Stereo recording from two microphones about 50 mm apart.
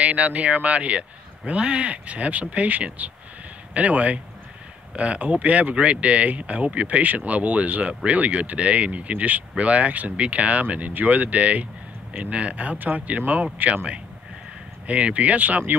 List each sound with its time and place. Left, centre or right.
0.0 s speech: right
14.9 s speech: right